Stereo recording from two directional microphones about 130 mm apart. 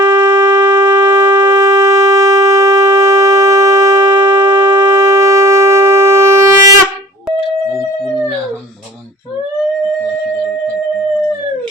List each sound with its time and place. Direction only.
0.0 s shofar: 35° right (ahead or behind)